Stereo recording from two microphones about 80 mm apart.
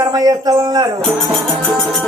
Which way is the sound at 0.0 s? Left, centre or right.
Right.